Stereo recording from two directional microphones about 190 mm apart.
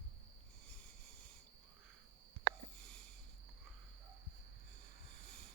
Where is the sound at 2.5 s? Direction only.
55° right (ahead or behind).